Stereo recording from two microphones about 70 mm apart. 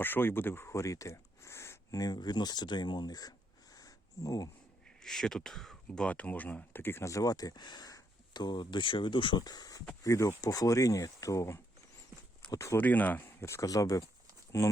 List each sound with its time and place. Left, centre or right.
0.0 s speech: left
2.0 s speech: left
3.8 s a sound: left
5.0 s speech: centre
6.1 s speech: left
7.0 s speech: left
9.4 s speech: left
10.0 s speech: left
12.7 s speech: left
13.4 s speech: left
13.7 s speech: left
14.6 s speech: left